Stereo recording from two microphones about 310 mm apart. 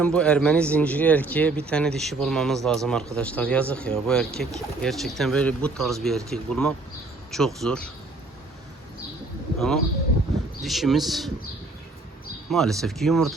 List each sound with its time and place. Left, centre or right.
0.0 s speech: centre
9.6 s speech: centre
12.5 s speech: centre